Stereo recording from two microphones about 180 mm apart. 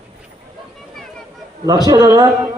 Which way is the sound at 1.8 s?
20° right (ahead or behind).